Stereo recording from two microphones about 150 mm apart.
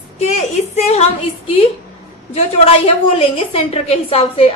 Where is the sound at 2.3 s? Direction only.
40° left (ahead or behind).